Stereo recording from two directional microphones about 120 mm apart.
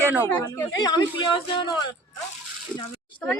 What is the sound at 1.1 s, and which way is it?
Speech, 40° left (ahead or behind).